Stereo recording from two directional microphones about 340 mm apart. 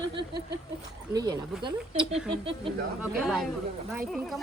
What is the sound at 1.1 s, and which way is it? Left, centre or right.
Speech, centre.